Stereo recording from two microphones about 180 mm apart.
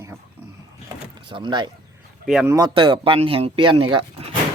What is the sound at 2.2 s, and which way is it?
Speech, 5° right (ahead or behind).